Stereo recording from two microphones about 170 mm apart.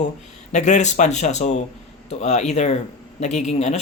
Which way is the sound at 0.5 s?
45° left (ahead or behind).